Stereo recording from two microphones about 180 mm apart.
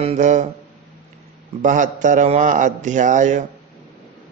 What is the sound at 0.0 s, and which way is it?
Mantra, 40° right (ahead or behind).